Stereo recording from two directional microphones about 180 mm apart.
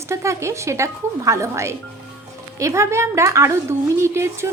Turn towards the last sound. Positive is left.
turn(degrees=-15)  # may be behind; listen again after turning